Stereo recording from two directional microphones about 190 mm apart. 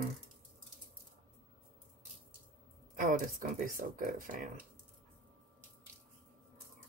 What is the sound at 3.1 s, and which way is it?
Speech, 45° right (ahead or behind).